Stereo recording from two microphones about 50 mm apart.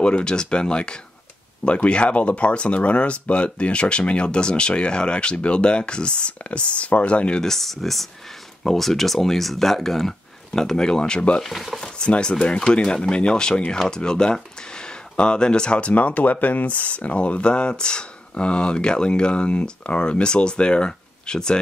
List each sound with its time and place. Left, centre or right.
0.0 s speech: centre
7.4 s speech: centre
11.4 s speech: centre
11.8 s speech: centre
15.9 s speech: left; by 21.5 s centre